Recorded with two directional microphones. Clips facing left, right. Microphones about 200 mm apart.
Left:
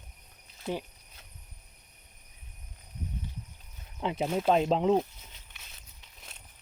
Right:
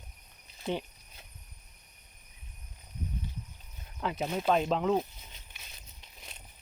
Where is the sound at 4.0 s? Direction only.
25° left (ahead or behind).